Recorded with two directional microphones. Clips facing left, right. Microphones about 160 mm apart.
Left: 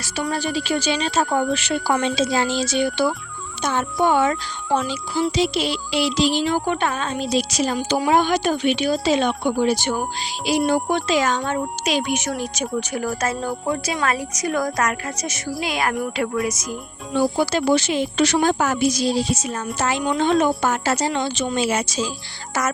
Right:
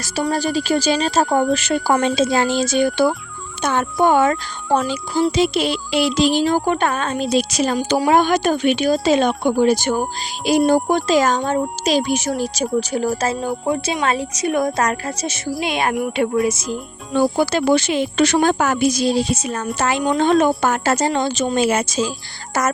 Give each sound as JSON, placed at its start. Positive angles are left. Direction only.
{"t": 0.0, "sound": "speech", "side_deg": -40}
{"t": 3.6, "sound": "speech", "side_deg": -55}
{"t": 8.1, "sound": "speech", "side_deg": -50}
{"t": 17.3, "sound": "speech", "side_deg": -55}
{"t": 20.1, "sound": "speech", "side_deg": -50}